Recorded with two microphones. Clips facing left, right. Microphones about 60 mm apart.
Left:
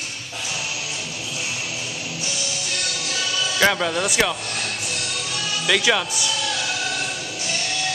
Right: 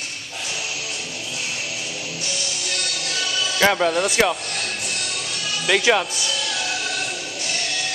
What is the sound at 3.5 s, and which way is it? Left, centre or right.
Speech, centre.